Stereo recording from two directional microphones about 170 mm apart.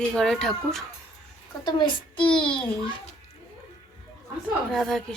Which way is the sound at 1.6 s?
30° left (ahead or behind).